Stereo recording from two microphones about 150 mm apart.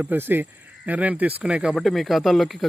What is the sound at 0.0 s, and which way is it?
Speech, 15° right (ahead or behind).